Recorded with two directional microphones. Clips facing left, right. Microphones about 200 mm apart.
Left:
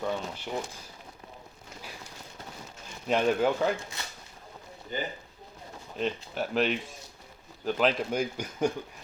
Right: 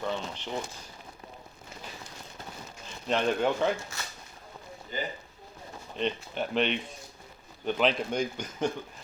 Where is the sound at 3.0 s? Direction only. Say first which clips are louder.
Left 2 dB; 5° left (ahead or behind).